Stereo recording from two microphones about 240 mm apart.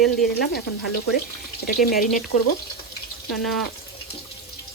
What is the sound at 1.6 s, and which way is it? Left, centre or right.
Speech, left.